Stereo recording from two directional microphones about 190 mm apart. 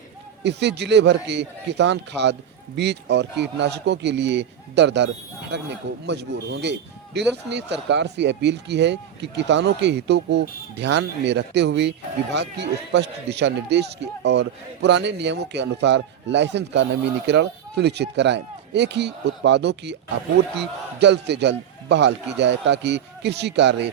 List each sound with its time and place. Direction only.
0.4 s a man's voice: 65° right (ahead or behind)